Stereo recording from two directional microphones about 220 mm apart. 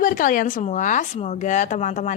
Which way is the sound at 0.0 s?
35° left (ahead or behind).